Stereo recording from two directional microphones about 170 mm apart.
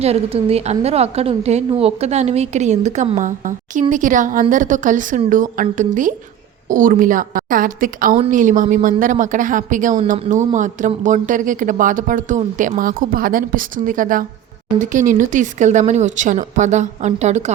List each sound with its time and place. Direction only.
0.0 s a woman's voice: 35° right (ahead or behind)